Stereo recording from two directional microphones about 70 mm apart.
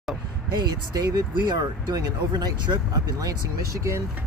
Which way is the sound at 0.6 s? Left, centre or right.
Right.